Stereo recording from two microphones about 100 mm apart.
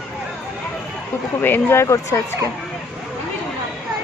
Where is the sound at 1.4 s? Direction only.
25° left (ahead or behind).